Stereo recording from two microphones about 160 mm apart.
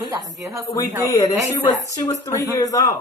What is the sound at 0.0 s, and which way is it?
Speech, 25° right (ahead or behind).